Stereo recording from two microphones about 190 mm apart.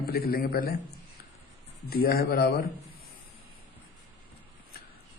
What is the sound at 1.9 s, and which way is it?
Speech, 55° left (ahead or behind).